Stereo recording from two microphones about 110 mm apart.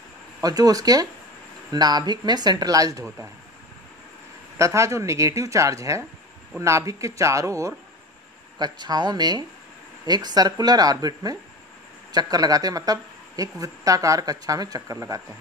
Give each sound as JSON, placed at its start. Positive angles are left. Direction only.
{"t": 0.4, "sound": "a woman's voice", "side_deg": -35}
{"t": 4.6, "sound": "speech", "side_deg": -25}
{"t": 8.5, "sound": "a woman's voice", "side_deg": -40}